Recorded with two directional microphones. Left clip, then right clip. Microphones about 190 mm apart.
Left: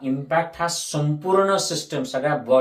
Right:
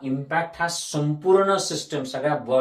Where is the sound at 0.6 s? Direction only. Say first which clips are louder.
Left 1 dB; 25° left (ahead or behind).